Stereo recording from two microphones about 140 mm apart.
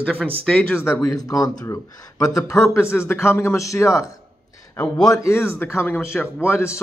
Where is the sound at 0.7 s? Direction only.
15° left (ahead or behind).